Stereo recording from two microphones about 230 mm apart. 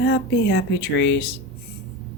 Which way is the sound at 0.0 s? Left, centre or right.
Left.